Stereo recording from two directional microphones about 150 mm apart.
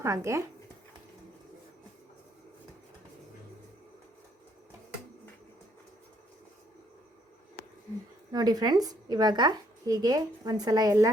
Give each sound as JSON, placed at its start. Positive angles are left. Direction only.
{"t": 0.0, "sound": "speech", "side_deg": -20}
{"t": 8.3, "sound": "speech", "side_deg": -25}